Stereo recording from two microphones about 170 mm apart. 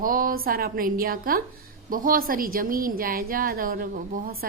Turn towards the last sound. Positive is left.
turn(degrees=-55)  # may be behind; listen again after turning